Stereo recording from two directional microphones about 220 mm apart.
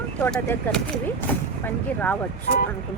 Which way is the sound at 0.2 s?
10° left (ahead or behind).